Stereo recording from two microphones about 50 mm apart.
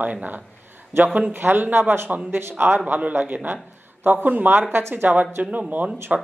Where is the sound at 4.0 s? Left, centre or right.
Right.